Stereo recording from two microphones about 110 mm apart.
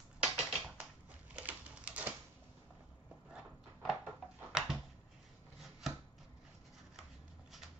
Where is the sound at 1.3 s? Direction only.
10° right (ahead or behind).